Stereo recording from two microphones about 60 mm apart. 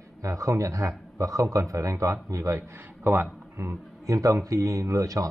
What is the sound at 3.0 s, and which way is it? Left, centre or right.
Speech, right.